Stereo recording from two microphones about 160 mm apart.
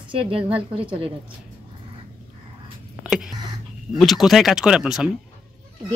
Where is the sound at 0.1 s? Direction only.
35° right (ahead or behind).